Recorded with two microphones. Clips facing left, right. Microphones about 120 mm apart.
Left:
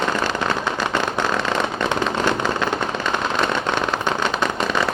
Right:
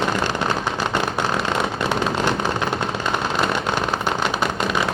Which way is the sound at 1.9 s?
15° right (ahead or behind).